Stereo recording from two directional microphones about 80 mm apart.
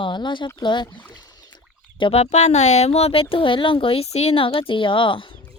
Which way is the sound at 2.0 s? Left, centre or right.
Left.